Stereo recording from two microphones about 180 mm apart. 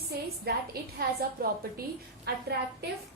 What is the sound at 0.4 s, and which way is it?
A woman's voice, 60° right (ahead or behind).